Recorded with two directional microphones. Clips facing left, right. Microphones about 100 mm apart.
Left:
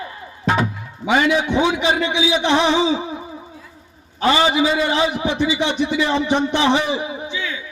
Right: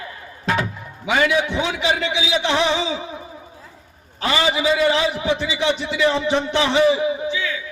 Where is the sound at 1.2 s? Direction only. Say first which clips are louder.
Left 3 dB; 20° left (ahead or behind).